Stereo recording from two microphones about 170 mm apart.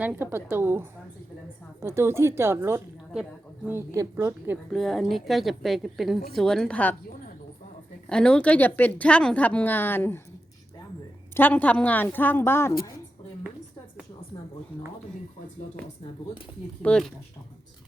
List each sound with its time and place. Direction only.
0.0 s a woman's voice: 10° right (ahead or behind)
4.7 s a woman's voice: centre (ahead or behind)
8.1 s a woman's voice: 5° left (ahead or behind)
11.3 s a woman's voice: 10° left (ahead or behind)
16.8 s a woman's voice: 5° left (ahead or behind)